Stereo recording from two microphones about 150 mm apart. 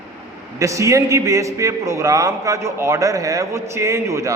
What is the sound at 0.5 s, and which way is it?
A man's voice, 20° right (ahead or behind).